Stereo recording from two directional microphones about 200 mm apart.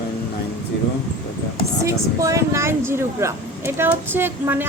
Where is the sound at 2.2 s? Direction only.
15° right (ahead or behind).